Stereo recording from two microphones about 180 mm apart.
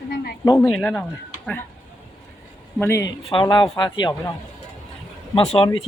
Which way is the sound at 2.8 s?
15° left (ahead or behind).